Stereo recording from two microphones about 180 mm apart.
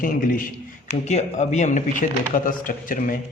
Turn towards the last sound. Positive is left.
turn(degrees=50)  # may be behind; listen again after turning